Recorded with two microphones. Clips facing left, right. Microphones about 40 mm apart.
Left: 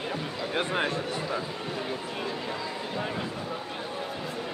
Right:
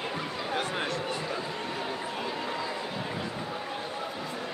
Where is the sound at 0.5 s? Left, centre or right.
Left.